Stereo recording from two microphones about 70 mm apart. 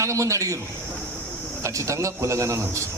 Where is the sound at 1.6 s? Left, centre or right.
Right.